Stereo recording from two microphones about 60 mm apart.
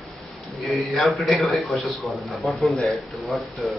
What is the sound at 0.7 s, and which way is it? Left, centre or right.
Speech, centre.